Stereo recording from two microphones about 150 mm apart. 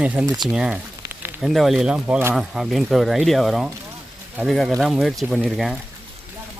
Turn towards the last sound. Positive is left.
turn(degrees=0)  # may be behind; listen again after turning